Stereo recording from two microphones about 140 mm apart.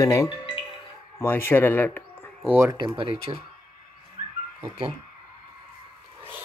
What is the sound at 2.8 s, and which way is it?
Speech, 35° right (ahead or behind).